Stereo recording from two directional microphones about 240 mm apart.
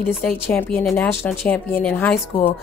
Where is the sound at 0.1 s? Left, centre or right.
Centre.